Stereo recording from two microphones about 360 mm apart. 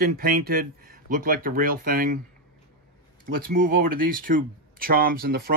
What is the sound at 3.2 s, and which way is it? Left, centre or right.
Speech, right.